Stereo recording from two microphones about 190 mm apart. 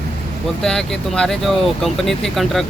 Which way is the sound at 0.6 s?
5° left (ahead or behind).